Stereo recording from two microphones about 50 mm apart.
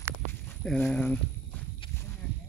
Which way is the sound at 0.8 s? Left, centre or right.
Left.